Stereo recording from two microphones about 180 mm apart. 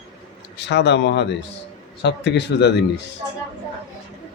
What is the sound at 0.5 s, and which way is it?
Speech, 75° left (ahead or behind).